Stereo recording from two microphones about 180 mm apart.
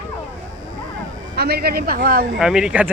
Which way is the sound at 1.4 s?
60° right (ahead or behind).